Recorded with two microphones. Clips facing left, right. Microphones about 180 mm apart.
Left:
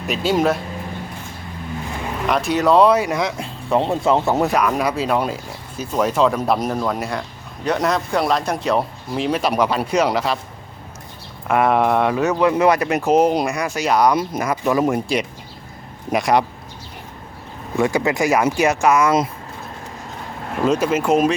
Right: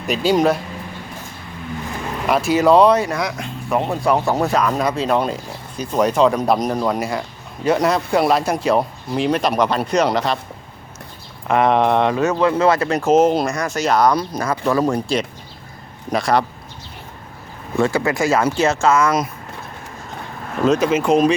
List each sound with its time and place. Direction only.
0.1 s speech: centre (ahead or behind)
2.2 s speech: 5° right (ahead or behind)
3.1 s speech: 25° left (ahead or behind); by 10.3 s 5° left (ahead or behind)
11.4 s speech: 10° left (ahead or behind)
17.7 s speech: 15° left (ahead or behind)
20.7 s speech: 5° left (ahead or behind)